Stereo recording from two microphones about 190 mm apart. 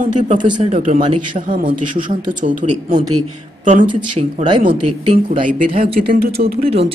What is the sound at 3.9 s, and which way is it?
Speech, 30° right (ahead or behind).